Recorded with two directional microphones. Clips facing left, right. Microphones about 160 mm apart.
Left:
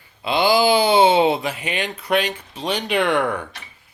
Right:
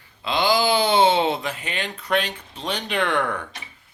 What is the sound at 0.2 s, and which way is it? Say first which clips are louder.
Speech: left 4 dB; 10° left (ahead or behind).